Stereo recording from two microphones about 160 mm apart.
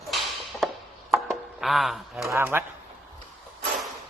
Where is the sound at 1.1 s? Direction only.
Centre (ahead or behind).